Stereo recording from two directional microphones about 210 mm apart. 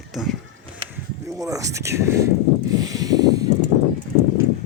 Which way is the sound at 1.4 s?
15° right (ahead or behind).